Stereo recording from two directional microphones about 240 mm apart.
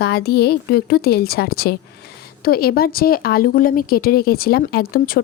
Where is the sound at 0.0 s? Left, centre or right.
Left.